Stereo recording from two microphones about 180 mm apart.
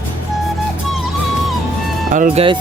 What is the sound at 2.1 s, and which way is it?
Speech, 45° right (ahead or behind).